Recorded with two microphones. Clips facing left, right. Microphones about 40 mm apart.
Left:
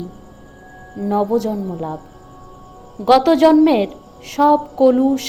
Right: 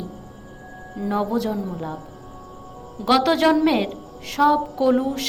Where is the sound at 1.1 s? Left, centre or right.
Right; by 2.0 s centre.